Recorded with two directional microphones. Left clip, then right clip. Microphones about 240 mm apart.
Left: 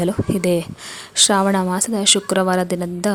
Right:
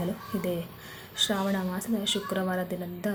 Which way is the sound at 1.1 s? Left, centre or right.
Left.